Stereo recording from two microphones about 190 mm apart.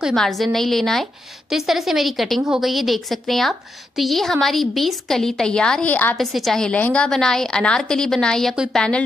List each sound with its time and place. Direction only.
0.0 s a woman's voice: centre (ahead or behind)